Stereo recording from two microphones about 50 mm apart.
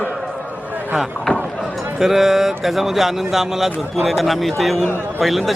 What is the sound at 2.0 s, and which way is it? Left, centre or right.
Speech, centre.